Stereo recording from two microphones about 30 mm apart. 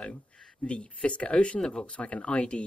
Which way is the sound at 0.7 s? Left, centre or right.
Left.